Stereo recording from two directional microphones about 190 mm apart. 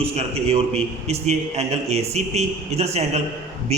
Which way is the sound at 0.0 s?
30° right (ahead or behind).